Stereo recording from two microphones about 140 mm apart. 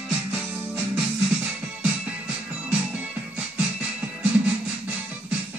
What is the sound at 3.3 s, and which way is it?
Music, 10° right (ahead or behind).